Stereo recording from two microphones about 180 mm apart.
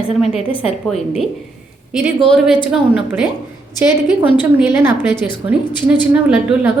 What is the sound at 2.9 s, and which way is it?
A woman's voice, 5° right (ahead or behind).